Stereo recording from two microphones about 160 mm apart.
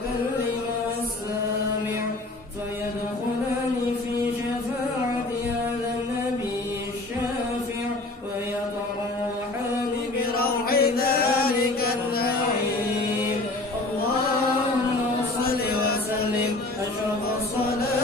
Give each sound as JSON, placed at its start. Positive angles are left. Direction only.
{"t": 10.3, "sound": "chant", "side_deg": 70}
{"t": 15.4, "sound": "chant", "side_deg": 75}